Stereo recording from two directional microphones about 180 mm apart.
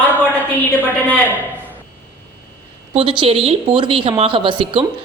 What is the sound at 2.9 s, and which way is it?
A woman's voice, 30° right (ahead or behind).